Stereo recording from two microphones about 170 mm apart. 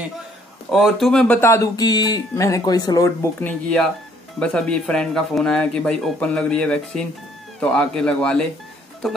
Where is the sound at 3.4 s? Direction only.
5° left (ahead or behind).